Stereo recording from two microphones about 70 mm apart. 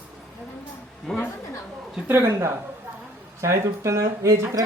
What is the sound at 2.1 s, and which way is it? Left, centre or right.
A woman's voice, right.